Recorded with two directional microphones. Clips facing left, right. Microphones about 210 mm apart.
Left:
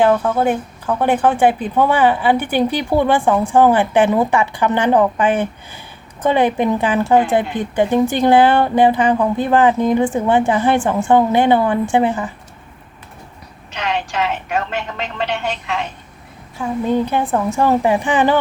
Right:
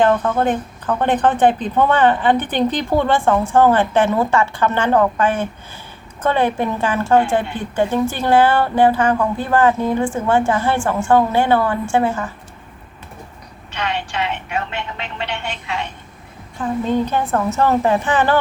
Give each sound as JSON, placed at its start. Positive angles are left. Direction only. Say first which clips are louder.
{"t": 0.0, "sound": "speech", "louder": "left 1 dB", "side_deg": 10}
{"t": 14.2, "sound": "a woman's voice", "louder": "left 2 dB", "side_deg": 40}
{"t": 16.6, "sound": "speech", "louder": "left 1 dB", "side_deg": 10}